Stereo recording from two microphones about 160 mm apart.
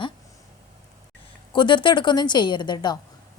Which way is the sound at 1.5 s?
30° left (ahead or behind).